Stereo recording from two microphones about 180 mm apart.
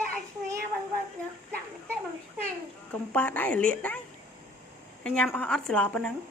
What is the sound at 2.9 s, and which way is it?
Speech, 10° left (ahead or behind).